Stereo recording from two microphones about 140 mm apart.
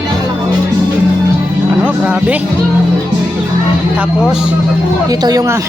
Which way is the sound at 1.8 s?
10° right (ahead or behind).